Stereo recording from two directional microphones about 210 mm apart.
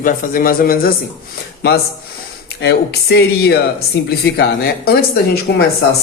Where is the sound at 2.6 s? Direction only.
50° left (ahead or behind).